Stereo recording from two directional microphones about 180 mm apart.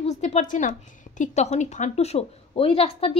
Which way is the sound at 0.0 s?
40° left (ahead or behind).